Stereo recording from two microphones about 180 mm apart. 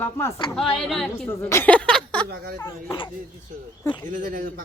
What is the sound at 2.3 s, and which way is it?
Speech, 60° right (ahead or behind).